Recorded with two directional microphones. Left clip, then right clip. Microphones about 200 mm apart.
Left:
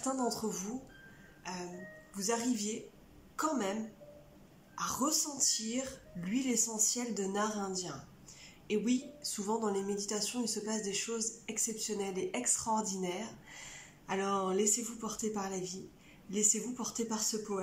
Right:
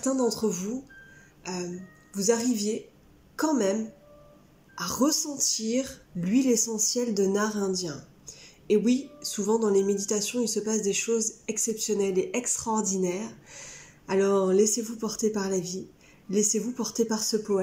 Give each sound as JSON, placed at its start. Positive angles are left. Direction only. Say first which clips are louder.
{"t": 0.0, "sound": "speech", "louder": "right 9 dB", "side_deg": -20}
{"t": 1.4, "sound": "music", "louder": "right 8 dB", "side_deg": -20}
{"t": 2.1, "sound": "speech", "louder": "right 9 dB", "side_deg": -20}
{"t": 4.7, "sound": "speech", "louder": "right 7 dB", "side_deg": -25}